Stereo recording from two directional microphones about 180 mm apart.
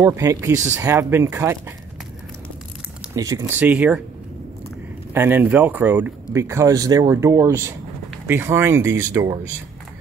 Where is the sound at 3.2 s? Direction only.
20° right (ahead or behind).